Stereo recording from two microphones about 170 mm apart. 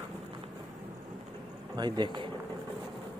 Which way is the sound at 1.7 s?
25° right (ahead or behind).